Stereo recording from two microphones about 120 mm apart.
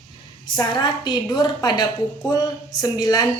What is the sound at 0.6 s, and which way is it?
A woman's voice, 40° left (ahead or behind).